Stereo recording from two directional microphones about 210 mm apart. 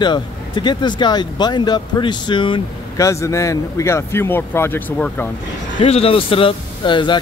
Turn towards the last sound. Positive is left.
turn(degrees=20)  # may be behind; listen again after turning